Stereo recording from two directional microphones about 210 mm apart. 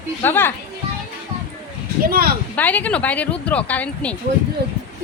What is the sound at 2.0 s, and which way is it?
Speech, 45° right (ahead or behind).